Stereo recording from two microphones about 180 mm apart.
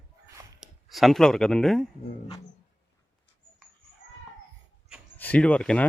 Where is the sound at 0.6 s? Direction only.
Centre (ahead or behind).